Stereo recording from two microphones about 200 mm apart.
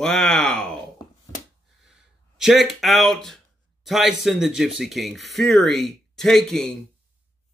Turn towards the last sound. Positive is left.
turn(degrees=0)  # may be behind; listen again after turning